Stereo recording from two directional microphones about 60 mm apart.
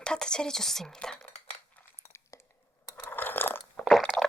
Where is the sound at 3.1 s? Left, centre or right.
Left.